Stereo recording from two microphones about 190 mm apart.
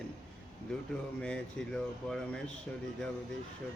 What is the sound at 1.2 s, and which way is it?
Speech, 5° left (ahead or behind).